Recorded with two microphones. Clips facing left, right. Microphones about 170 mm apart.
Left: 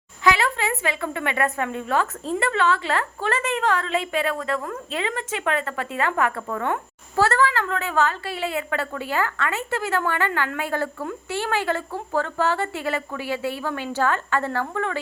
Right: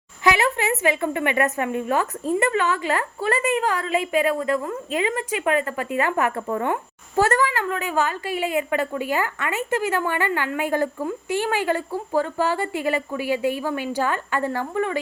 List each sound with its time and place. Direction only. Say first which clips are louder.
0.3 s a woman's voice: right 1 dB; 20° right (ahead or behind)